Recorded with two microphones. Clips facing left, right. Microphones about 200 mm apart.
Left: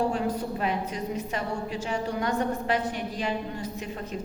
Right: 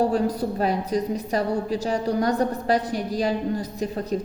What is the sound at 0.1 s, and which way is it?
A woman's voice, 40° right (ahead or behind).